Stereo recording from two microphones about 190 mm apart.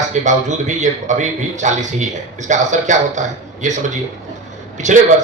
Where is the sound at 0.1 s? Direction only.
40° right (ahead or behind).